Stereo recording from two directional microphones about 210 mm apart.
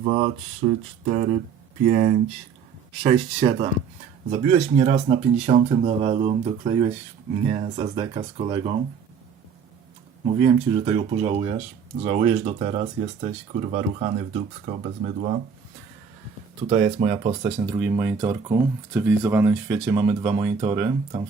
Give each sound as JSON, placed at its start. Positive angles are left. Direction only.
{"t": 0.0, "sound": "speech", "side_deg": -30}
{"t": 4.8, "sound": "speech", "side_deg": -35}
{"t": 10.2, "sound": "speech", "side_deg": -30}
{"t": 16.6, "sound": "speech", "side_deg": -30}